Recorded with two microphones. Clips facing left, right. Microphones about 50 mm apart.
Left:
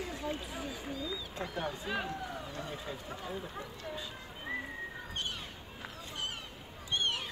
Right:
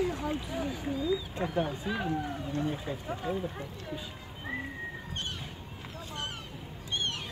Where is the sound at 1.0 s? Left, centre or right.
Centre.